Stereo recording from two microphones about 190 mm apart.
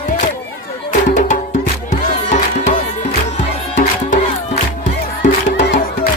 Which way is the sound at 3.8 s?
40° left (ahead or behind).